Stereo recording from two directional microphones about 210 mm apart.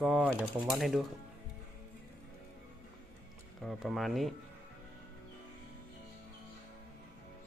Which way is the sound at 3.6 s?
Centre (ahead or behind).